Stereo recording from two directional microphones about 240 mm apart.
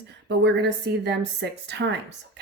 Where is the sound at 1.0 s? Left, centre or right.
Right.